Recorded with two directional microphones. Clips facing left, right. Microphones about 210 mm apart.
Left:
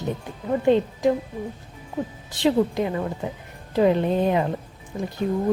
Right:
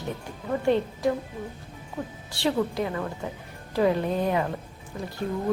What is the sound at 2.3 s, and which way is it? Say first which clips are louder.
Speech: left 5 dB; 20° left (ahead or behind).